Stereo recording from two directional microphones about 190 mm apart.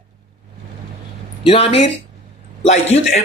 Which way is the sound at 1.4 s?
30° left (ahead or behind).